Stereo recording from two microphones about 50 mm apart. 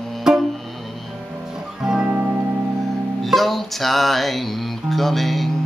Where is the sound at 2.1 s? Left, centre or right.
Right.